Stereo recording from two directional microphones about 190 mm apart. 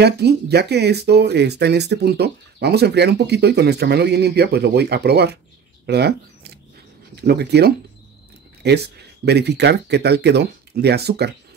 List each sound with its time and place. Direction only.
0.0 s speech: 60° right (ahead or behind)
5.9 s a sound: 55° right (ahead or behind)
7.2 s speech: 60° right (ahead or behind)